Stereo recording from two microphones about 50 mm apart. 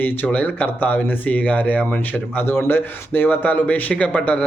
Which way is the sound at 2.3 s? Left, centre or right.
Left.